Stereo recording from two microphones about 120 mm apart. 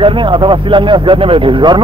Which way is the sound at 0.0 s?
40° right (ahead or behind).